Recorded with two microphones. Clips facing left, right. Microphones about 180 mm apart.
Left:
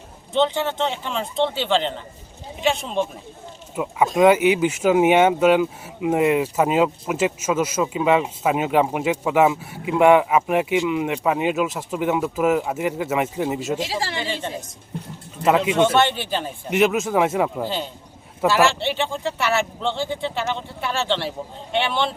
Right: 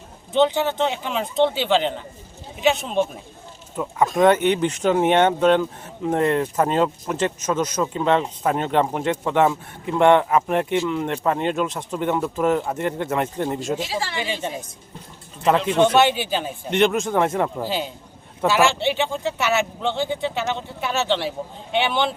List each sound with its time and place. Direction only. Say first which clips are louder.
0.3 s speech: right 2 dB; 5° right (ahead or behind)
13.8 s speech: even; 35° left (ahead or behind)
15.4 s speech: left 1 dB; 5° left (ahead or behind)
15.8 s speech: right 1 dB; 5° right (ahead or behind)